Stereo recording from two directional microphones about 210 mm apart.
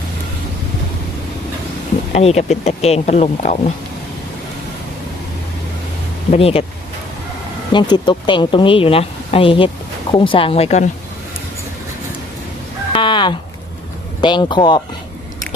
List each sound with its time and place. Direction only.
2.1 s speech: 30° left (ahead or behind)
6.3 s speech: 30° left (ahead or behind)
7.7 s speech: 20° left (ahead or behind)
12.9 s a sound: 25° left (ahead or behind)
14.2 s speech: 20° left (ahead or behind)